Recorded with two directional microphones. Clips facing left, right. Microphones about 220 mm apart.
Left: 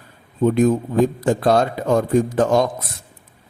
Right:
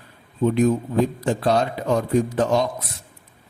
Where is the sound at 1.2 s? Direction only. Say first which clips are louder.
Left 4 dB; 50° left (ahead or behind).